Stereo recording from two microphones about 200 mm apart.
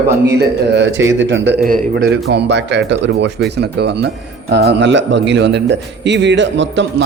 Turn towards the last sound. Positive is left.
turn(degrees=-65)  # may be behind; listen again after turning